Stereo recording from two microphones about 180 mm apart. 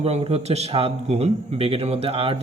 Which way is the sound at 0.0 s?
35° right (ahead or behind).